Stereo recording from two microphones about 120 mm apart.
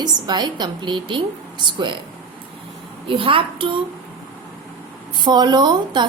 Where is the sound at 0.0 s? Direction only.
35° right (ahead or behind).